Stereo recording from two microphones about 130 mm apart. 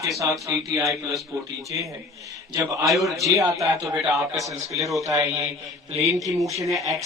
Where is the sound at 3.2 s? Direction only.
25° right (ahead or behind).